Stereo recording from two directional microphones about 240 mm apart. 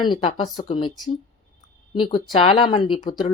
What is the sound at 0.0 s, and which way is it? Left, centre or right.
Speech, left.